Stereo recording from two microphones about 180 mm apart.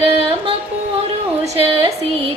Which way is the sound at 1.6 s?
30° right (ahead or behind).